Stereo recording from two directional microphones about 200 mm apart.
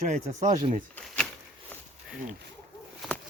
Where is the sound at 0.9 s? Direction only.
5° left (ahead or behind).